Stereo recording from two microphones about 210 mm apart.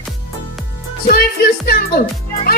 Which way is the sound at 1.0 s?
45° left (ahead or behind).